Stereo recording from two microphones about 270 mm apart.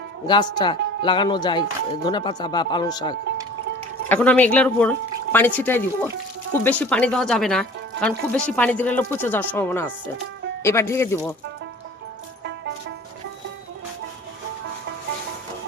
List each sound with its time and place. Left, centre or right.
0.3 s speech: centre